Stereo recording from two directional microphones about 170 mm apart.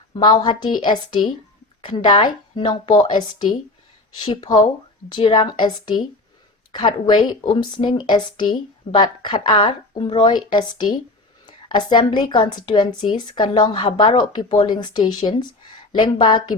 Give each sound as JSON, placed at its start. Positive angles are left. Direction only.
{"t": 0.1, "sound": "a woman's voice", "side_deg": 25}